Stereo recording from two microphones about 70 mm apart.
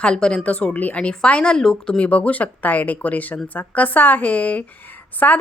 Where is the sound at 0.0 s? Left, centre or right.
Centre.